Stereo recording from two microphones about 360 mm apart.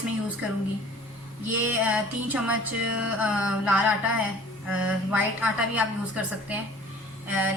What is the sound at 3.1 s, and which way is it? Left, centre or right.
A woman's voice, centre.